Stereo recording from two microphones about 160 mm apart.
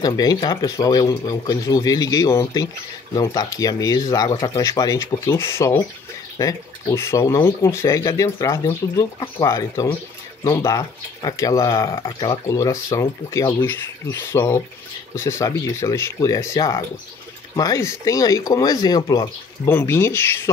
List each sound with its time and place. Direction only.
0.0 s speech: 25° left (ahead or behind)